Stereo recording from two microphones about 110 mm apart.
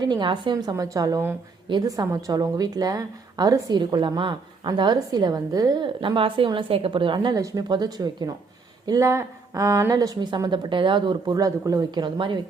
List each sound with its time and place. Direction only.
0.0 s a woman's voice: 45° right (ahead or behind)
0.5 s a woman's voice: 35° right (ahead or behind)
5.8 s a woman's voice: 50° right (ahead or behind)
7.3 s a woman's voice: 35° right (ahead or behind)